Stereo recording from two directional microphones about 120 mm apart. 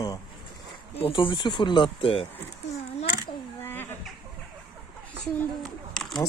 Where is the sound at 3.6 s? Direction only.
20° left (ahead or behind).